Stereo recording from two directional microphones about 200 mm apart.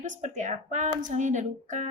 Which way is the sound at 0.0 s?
40° right (ahead or behind).